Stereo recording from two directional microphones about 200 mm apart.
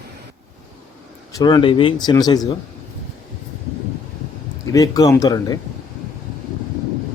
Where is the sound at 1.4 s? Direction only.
20° left (ahead or behind).